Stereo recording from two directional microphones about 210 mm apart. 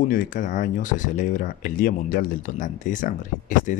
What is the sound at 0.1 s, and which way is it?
Speech, 40° left (ahead or behind).